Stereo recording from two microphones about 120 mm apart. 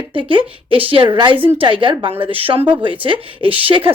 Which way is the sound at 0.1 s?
45° right (ahead or behind).